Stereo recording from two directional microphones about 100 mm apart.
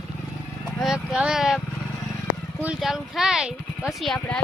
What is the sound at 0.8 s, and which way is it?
Speech, 5° right (ahead or behind).